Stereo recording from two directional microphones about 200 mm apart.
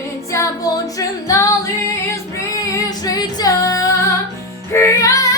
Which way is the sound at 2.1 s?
15° left (ahead or behind).